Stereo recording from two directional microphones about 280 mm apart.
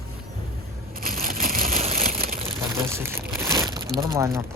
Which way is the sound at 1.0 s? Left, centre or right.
Right.